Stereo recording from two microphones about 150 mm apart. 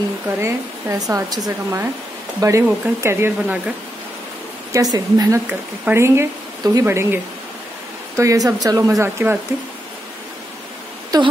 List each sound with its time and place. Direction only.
0.4 s speech: 20° right (ahead or behind)
4.7 s speech: 25° right (ahead or behind)
5.5 s speech: 15° right (ahead or behind)
8.2 s speech: 20° right (ahead or behind)
11.1 s speech: 25° right (ahead or behind)